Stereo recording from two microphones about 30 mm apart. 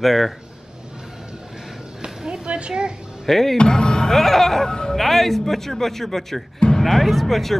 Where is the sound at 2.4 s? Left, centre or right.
Right.